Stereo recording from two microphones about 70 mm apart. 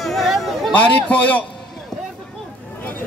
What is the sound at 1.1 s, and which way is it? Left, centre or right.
Speech, left.